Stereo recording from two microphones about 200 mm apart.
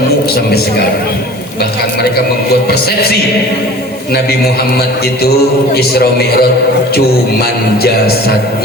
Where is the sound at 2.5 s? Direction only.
50° left (ahead or behind).